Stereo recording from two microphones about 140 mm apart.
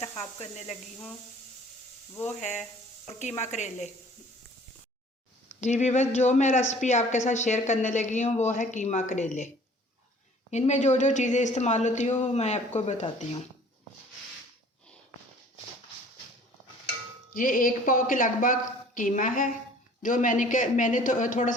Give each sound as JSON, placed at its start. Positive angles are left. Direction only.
{"t": 0.2, "sound": "speech", "side_deg": 50}
{"t": 3.4, "sound": "a man's voice", "side_deg": 55}
{"t": 5.5, "sound": "a man's voice", "side_deg": 55}
{"t": 10.5, "sound": "a man's voice", "side_deg": 55}
{"t": 17.3, "sound": "a woman's voice", "side_deg": 80}